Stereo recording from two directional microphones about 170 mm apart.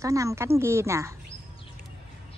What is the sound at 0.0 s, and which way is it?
A woman's voice, 20° right (ahead or behind).